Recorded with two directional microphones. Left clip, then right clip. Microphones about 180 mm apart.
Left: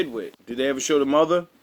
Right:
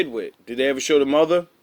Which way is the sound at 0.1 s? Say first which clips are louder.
Right 3 dB; centre (ahead or behind).